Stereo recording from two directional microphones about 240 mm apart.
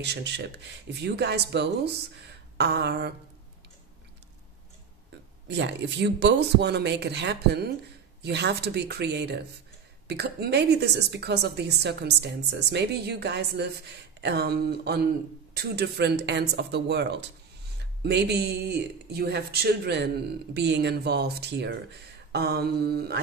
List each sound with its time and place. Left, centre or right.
0.0 s a woman's voice: right
5.5 s a woman's voice: right
22.3 s mantra: right